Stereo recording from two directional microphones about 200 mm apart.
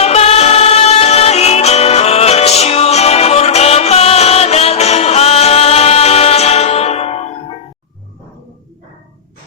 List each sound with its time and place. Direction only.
0.0 s music: 30° left (ahead or behind)